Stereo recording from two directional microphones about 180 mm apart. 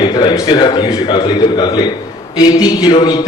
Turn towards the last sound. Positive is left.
turn(degrees=20)  # may be behind; listen again after turning